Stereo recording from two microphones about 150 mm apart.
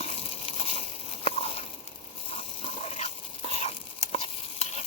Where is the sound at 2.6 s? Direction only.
45° left (ahead or behind).